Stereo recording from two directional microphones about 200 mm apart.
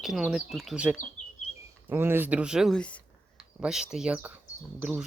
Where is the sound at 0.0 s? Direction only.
Centre (ahead or behind).